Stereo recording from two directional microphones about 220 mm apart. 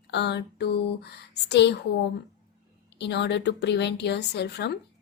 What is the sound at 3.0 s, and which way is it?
Speech, 50° left (ahead or behind).